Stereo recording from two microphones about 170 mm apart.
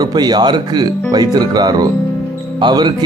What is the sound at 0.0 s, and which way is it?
Speech, 25° right (ahead or behind).